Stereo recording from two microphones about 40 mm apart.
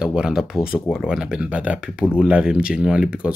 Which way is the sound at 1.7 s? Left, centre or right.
Centre.